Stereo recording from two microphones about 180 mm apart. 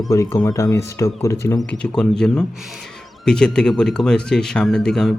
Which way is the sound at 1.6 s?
5° left (ahead or behind).